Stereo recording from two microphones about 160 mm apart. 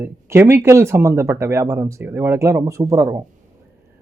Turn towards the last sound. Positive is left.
turn(degrees=-20)  # may be behind; listen again after turning